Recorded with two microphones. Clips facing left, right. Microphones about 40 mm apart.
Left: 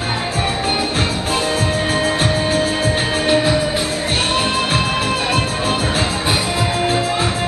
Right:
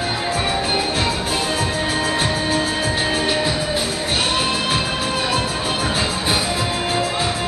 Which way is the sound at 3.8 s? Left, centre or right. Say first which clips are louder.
Left 2 dB; left.